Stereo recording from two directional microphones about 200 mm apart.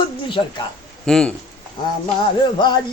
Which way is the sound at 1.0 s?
5° left (ahead or behind).